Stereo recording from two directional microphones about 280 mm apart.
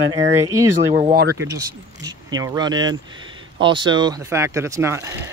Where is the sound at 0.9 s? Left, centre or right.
Right.